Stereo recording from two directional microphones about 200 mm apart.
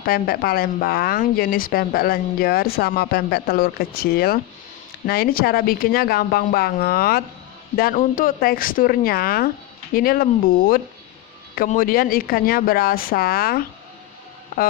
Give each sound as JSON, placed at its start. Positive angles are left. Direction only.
{"t": 0.0, "sound": "speech", "side_deg": 50}